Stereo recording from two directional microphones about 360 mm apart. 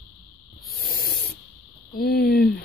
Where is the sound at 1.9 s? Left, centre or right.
Left.